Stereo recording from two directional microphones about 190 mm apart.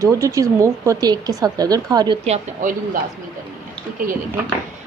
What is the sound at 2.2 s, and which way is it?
Speech, 40° right (ahead or behind).